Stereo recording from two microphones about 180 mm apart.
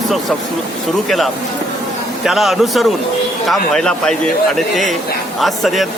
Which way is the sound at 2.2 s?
Centre (ahead or behind).